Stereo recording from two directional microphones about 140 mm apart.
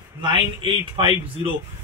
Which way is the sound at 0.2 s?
35° right (ahead or behind).